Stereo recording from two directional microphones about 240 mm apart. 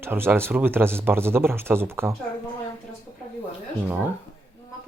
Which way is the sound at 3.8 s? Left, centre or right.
Centre.